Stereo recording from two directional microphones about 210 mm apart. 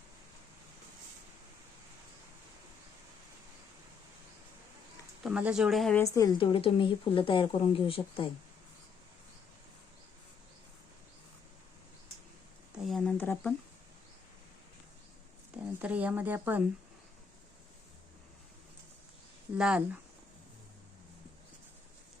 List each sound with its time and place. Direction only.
5.2 s a woman's voice: 5° right (ahead or behind)
6.1 s a woman's voice: 20° left (ahead or behind)
12.7 s a sound: centre (ahead or behind)
15.5 s a woman's voice: 5° right (ahead or behind)
19.5 s a woman's voice: 5° right (ahead or behind)